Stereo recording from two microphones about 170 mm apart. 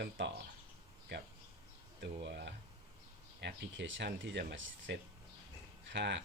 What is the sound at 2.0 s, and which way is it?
Speech, 90° right.